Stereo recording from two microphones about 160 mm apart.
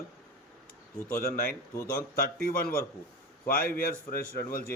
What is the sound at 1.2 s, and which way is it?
Speech, 65° left (ahead or behind).